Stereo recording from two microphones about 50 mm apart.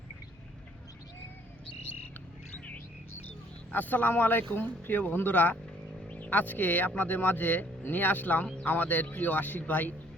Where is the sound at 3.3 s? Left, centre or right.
Left.